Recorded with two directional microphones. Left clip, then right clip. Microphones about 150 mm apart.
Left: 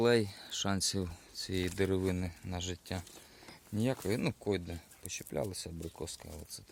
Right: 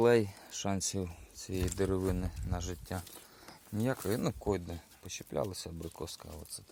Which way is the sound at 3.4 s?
30° left (ahead or behind).